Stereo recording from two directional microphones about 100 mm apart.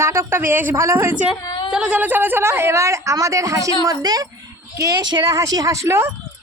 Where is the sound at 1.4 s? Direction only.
45° left (ahead or behind).